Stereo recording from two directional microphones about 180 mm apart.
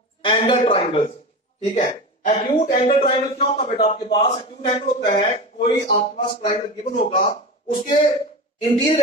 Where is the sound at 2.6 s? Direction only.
50° left (ahead or behind).